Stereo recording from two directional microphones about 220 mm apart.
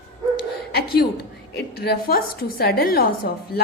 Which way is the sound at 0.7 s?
45° left (ahead or behind).